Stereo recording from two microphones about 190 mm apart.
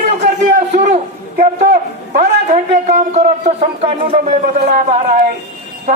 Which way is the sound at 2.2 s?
40° right (ahead or behind).